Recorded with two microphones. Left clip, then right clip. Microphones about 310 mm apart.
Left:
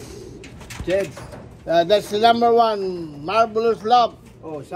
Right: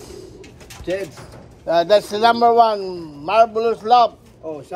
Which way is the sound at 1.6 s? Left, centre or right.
Centre.